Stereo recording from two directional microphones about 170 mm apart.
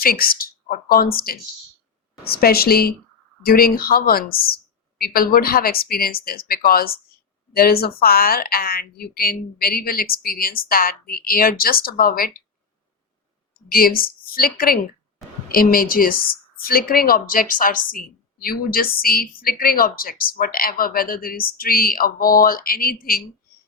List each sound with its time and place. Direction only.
0.0 s a woman's voice: 60° left (ahead or behind)
13.7 s a woman's voice: 60° left (ahead or behind)